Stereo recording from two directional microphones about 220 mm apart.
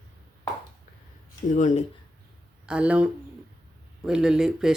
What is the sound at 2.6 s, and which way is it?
Speech, 5° right (ahead or behind).